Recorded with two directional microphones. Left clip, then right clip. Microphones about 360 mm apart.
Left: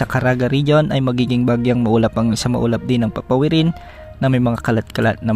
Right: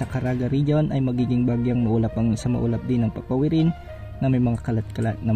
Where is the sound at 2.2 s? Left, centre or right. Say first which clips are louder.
Left 7 dB; left.